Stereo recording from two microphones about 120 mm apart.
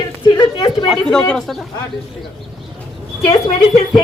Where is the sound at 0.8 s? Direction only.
Centre (ahead or behind).